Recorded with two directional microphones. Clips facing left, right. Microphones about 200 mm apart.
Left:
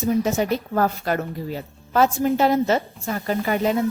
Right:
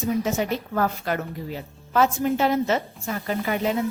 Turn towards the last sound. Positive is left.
turn(degrees=40)  # may be behind; listen again after turning